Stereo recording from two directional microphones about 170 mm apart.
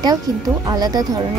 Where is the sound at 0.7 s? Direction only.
25° right (ahead or behind).